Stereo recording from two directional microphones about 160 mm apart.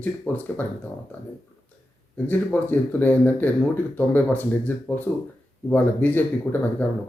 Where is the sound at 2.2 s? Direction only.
10° left (ahead or behind).